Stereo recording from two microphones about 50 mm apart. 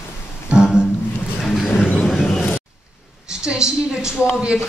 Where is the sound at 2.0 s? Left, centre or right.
Centre.